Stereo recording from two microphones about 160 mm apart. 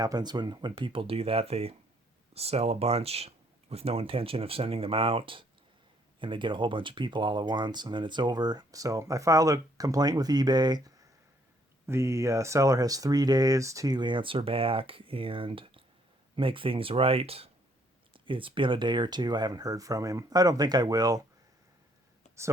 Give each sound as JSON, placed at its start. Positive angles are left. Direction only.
{"t": 0.0, "sound": "speech", "side_deg": -25}